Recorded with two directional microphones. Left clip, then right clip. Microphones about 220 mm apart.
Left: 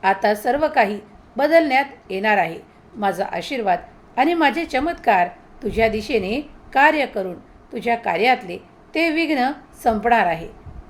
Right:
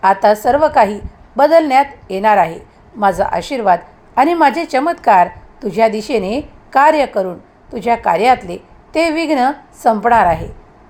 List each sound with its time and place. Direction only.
0.0 s a woman's voice: 20° right (ahead or behind)